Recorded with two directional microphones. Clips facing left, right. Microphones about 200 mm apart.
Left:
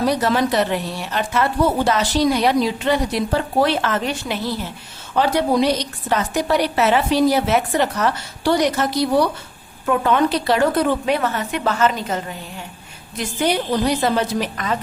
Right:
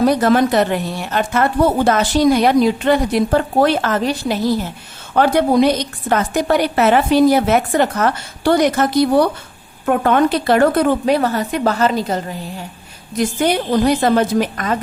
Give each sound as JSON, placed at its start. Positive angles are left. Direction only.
{"t": 0.0, "sound": "a woman's voice", "side_deg": -50}
{"t": 5.1, "sound": "a woman's voice", "side_deg": -55}
{"t": 11.0, "sound": "a woman's voice", "side_deg": -35}
{"t": 13.1, "sound": "a woman's voice", "side_deg": -50}